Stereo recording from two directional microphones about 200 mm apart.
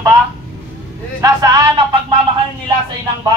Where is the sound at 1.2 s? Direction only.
20° right (ahead or behind).